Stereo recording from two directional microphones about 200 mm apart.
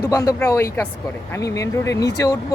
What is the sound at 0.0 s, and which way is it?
Speech, 15° left (ahead or behind).